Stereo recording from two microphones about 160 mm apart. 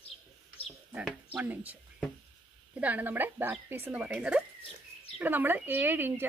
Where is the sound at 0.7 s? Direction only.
5° right (ahead or behind).